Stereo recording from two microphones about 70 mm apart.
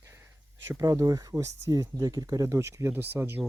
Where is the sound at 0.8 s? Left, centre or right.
Right.